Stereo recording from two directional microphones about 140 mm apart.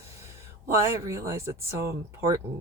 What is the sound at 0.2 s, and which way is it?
Speech, 20° right (ahead or behind).